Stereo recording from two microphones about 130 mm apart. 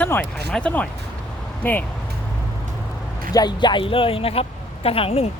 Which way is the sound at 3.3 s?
30° left (ahead or behind).